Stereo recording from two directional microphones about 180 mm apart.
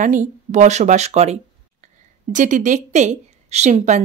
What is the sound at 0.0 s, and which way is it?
A woman's voice, 45° right (ahead or behind).